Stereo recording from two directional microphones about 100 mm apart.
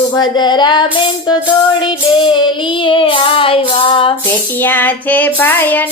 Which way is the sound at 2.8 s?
60° left (ahead or behind).